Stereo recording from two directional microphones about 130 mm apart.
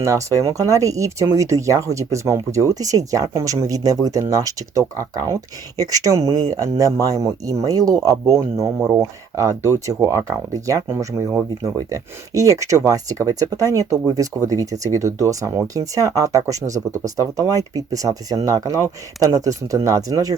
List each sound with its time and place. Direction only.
0.0 s speech: 25° right (ahead or behind)